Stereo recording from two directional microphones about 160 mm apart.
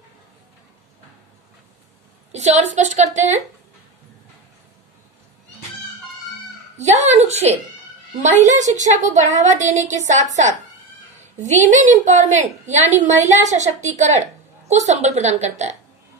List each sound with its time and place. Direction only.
2.3 s a woman's voice: 45° right (ahead or behind)
6.8 s a woman's voice: 45° right (ahead or behind)
11.3 s a woman's voice: 45° right (ahead or behind)